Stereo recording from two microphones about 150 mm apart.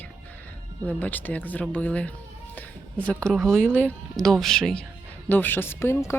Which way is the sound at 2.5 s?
10° left (ahead or behind).